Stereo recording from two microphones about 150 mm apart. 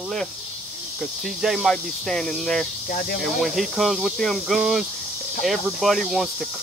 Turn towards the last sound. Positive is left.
turn(degrees=0)  # may be behind; listen again after turning